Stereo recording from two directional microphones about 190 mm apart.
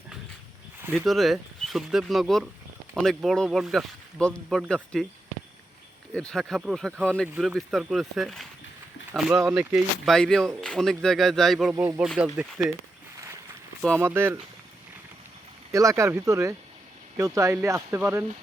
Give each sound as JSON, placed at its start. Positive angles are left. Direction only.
{"t": 0.8, "sound": "speech", "side_deg": -10}
{"t": 1.0, "sound": "speech", "side_deg": 0}
{"t": 6.1, "sound": "speech", "side_deg": 5}
{"t": 11.7, "sound": "speech", "side_deg": -10}
{"t": 14.0, "sound": "speech", "side_deg": -10}
{"t": 15.7, "sound": "speech", "side_deg": -15}